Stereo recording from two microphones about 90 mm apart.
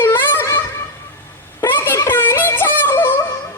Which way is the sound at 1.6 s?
25° left (ahead or behind).